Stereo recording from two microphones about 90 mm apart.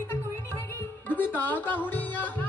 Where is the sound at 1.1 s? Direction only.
20° left (ahead or behind).